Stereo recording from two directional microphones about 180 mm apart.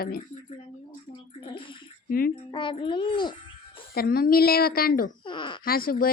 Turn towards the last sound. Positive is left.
turn(degrees=55)  # may be behind; listen again after turning